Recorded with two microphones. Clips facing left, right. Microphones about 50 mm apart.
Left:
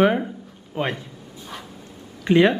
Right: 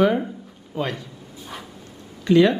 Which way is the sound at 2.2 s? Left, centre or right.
Left.